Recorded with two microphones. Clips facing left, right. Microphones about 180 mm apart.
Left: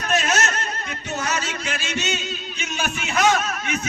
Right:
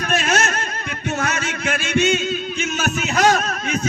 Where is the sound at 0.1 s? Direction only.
55° right (ahead or behind).